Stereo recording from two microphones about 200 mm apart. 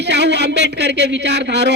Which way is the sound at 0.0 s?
60° right (ahead or behind).